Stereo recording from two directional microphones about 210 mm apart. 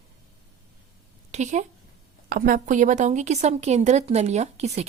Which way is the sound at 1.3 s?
35° right (ahead or behind).